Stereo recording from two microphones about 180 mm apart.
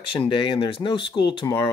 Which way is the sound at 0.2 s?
30° left (ahead or behind).